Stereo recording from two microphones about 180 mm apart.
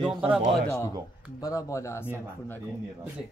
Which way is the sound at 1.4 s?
20° left (ahead or behind).